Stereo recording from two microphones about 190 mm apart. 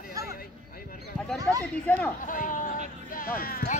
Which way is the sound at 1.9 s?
10° left (ahead or behind).